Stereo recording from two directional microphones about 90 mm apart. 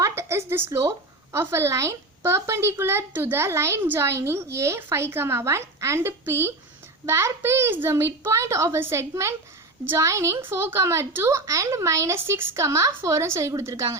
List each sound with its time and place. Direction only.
0.0 s a woman's voice: 30° right (ahead or behind)